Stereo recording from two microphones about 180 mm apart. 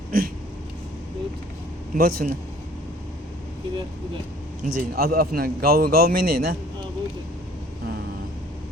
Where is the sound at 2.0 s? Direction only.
55° right (ahead or behind).